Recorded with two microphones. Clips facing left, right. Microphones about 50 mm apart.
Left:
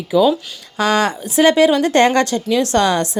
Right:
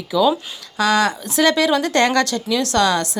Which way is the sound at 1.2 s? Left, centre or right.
Left.